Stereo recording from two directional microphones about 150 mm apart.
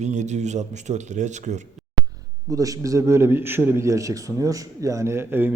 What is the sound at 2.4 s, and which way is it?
A man's voice, 25° right (ahead or behind).